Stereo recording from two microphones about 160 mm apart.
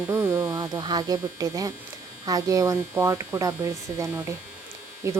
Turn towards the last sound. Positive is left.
turn(degrees=-20)  # may be behind; listen again after turning